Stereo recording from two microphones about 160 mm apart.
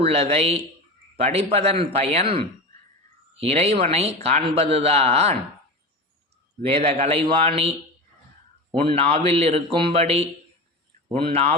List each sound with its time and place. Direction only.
0.0 s speech: 40° right (ahead or behind)
6.7 s speech: 40° right (ahead or behind)